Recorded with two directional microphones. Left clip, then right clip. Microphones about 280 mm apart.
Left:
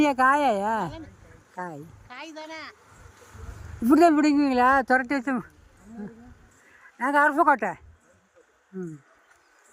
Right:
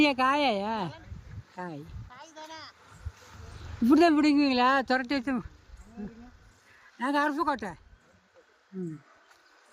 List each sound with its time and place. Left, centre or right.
0.0 s speech: centre
2.0 s a sound: left
3.8 s speech: centre
4.9 s speech: centre
7.0 s a woman's voice: centre